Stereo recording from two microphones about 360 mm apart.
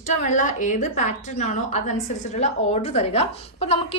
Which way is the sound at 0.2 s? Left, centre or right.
Left.